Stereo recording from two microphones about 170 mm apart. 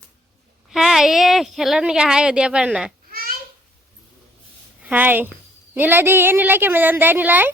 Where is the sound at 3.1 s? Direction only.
60° right (ahead or behind).